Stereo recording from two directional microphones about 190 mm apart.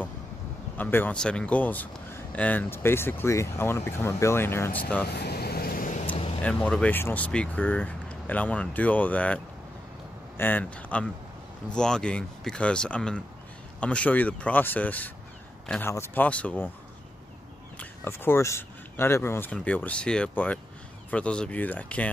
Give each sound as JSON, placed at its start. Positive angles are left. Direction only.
{"t": 0.7, "sound": "speech", "side_deg": 10}
{"t": 5.1, "sound": "vehicle", "side_deg": 55}
{"t": 6.0, "sound": "a sound", "side_deg": 30}
{"t": 6.4, "sound": "speech", "side_deg": 5}
{"t": 17.7, "sound": "speech", "side_deg": 10}